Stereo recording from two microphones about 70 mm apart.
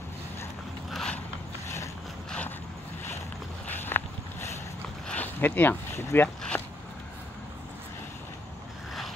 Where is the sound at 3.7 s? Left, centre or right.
Left.